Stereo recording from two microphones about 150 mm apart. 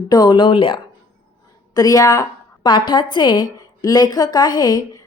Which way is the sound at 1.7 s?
25° left (ahead or behind).